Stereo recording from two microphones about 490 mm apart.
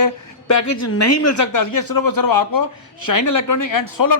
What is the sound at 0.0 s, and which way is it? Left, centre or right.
Speech, left.